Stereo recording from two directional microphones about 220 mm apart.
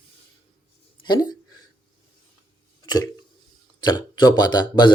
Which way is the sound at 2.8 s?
20° left (ahead or behind).